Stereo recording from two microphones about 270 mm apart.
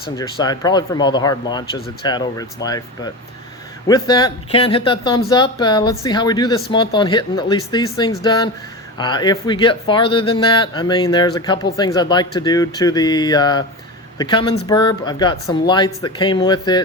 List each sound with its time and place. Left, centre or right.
0.2 s speech: centre